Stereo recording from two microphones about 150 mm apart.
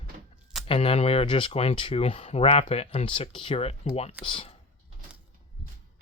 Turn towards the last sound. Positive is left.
turn(degrees=35)  # may be behind; listen again after turning